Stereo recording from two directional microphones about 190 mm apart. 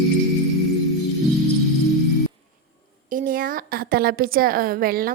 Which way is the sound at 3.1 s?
45° right (ahead or behind).